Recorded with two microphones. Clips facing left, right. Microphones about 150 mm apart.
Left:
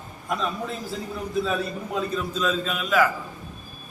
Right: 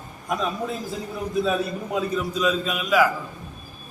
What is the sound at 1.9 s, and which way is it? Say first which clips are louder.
A man's voice: right 2 dB; 10° right (ahead or behind).